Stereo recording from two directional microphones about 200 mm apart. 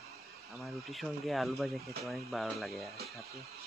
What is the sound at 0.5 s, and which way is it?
Speech, centre (ahead or behind).